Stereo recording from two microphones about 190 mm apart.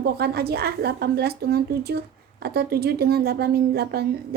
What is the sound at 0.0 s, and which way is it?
A woman's voice, 55° right (ahead or behind).